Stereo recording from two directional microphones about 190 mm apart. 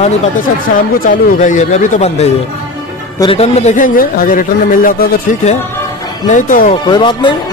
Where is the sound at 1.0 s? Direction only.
45° left (ahead or behind).